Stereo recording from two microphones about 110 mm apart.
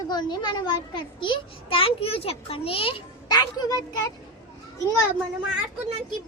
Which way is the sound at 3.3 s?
35° left (ahead or behind).